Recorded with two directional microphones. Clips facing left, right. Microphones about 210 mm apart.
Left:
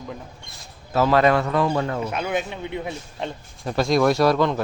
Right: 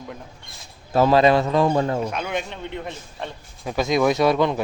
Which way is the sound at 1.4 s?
30° right (ahead or behind).